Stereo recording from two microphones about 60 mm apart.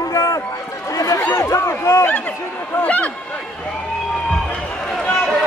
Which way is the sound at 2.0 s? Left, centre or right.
Left.